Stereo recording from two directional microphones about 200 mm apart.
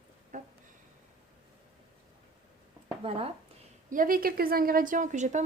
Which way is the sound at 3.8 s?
45° right (ahead or behind).